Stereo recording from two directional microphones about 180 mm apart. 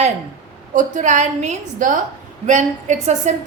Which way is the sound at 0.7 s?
45° right (ahead or behind).